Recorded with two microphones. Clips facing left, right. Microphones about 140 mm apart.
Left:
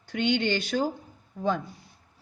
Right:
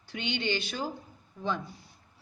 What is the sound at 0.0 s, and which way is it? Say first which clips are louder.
A woman's voice: left 8 dB; 50° left (ahead or behind).